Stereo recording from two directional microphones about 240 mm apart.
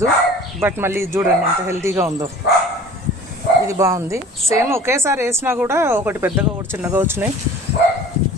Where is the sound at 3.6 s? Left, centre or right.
Centre.